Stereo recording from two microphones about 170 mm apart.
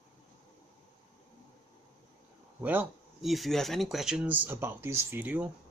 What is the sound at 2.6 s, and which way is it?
Speech, 10° right (ahead or behind).